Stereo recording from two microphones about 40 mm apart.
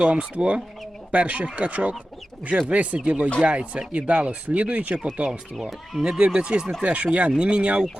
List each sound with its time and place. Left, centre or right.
0.0 s speech: right
6.0 s speech: right
6.8 s speech: right